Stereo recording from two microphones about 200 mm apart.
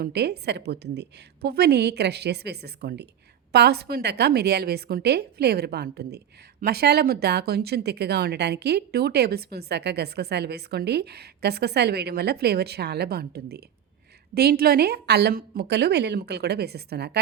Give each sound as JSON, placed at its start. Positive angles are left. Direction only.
{"t": 0.0, "sound": "a woman's voice", "side_deg": -55}